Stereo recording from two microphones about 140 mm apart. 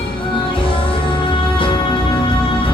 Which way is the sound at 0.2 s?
40° left (ahead or behind).